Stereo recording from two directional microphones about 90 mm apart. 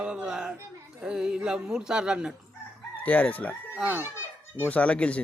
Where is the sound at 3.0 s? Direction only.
15° left (ahead or behind).